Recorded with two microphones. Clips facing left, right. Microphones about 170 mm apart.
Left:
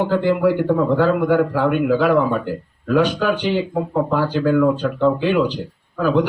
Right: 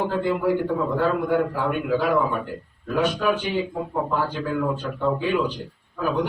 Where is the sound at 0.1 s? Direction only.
80° left.